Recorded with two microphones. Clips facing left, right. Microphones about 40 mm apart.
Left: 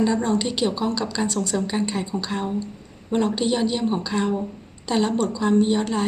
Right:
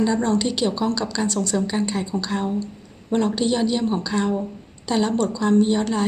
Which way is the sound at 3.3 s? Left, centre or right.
Left.